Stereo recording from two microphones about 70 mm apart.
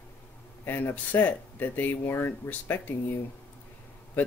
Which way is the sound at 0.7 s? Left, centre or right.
Left.